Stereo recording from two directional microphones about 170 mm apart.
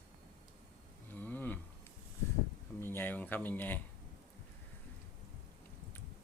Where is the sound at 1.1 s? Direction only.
10° left (ahead or behind).